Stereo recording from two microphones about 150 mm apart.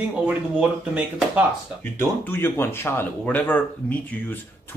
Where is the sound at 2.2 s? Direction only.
15° left (ahead or behind).